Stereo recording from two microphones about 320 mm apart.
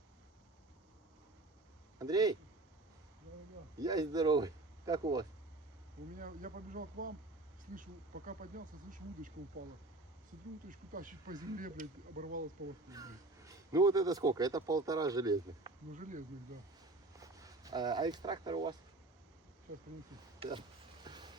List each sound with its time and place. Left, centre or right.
2.0 s speech: centre
3.8 s speech: centre
6.1 s speech: right
10.7 s speech: right
12.9 s speech: centre
16.0 s speech: right
17.2 s speech: centre
20.4 s a sound: centre